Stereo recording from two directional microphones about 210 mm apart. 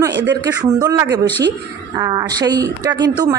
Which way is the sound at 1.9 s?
20° right (ahead or behind).